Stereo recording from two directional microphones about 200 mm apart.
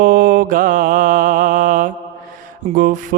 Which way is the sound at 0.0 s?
45° right (ahead or behind).